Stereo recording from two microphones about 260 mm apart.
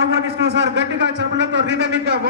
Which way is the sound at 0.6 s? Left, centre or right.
Right.